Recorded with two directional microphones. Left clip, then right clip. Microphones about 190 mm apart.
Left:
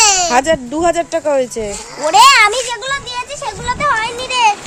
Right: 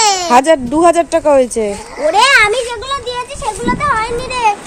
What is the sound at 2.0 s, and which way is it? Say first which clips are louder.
Speech: left 1 dB; 55° left (ahead or behind).